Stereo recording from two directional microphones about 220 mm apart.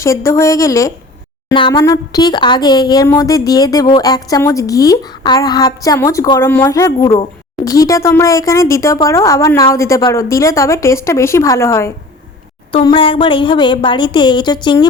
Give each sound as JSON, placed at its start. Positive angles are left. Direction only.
{"t": 0.0, "sound": "speech", "side_deg": 15}
{"t": 12.7, "sound": "a woman's voice", "side_deg": 25}